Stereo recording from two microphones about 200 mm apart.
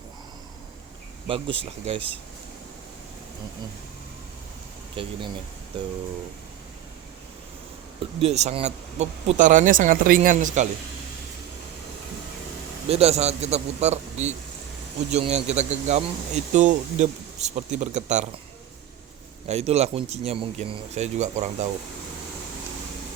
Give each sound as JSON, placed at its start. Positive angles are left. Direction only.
{"t": 1.3, "sound": "speech", "side_deg": -30}
{"t": 5.0, "sound": "speech", "side_deg": -25}
{"t": 8.2, "sound": "speech", "side_deg": -35}
{"t": 12.9, "sound": "speech", "side_deg": -30}
{"t": 19.5, "sound": "speech", "side_deg": -30}